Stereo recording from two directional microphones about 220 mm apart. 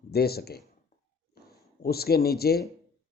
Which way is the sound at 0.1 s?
45° left (ahead or behind).